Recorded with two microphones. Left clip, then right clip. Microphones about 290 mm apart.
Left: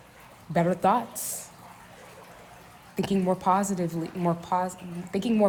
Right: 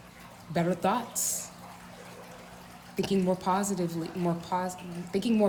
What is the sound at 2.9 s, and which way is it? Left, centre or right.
A woman's voice, left.